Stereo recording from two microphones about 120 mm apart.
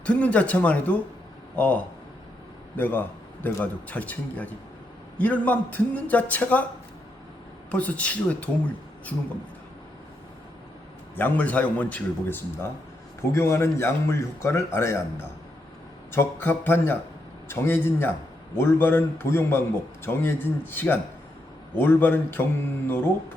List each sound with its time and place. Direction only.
0.0 s a man's voice: 10° left (ahead or behind)
7.7 s a man's voice: 10° left (ahead or behind)
11.1 s a man's voice: 15° left (ahead or behind)
13.3 s a man's voice: 25° left (ahead or behind)
16.1 s a man's voice: 15° left (ahead or behind)